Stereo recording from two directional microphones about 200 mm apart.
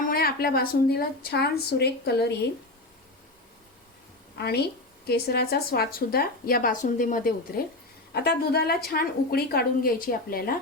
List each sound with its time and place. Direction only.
0.1 s a woman's voice: 50° left (ahead or behind)
4.4 s a woman's voice: 55° left (ahead or behind)